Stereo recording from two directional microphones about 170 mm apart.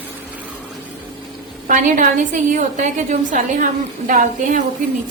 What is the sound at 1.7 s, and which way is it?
A woman's voice, 50° right (ahead or behind).